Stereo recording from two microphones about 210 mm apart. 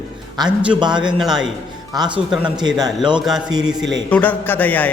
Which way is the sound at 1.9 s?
20° right (ahead or behind).